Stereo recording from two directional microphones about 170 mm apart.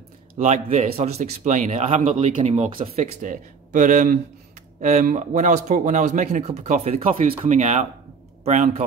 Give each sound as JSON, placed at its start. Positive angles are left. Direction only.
{"t": 0.4, "sound": "speech", "side_deg": -40}